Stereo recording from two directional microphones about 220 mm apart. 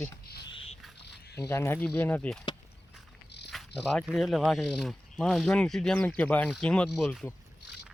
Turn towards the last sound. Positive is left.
turn(degrees=5)  # may be behind; listen again after turning